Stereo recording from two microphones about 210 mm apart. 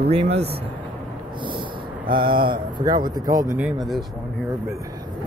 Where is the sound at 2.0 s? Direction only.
25° right (ahead or behind).